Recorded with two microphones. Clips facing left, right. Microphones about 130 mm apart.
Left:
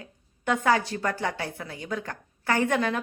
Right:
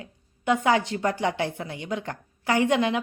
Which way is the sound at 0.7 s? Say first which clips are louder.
Right 1 dB; 20° right (ahead or behind).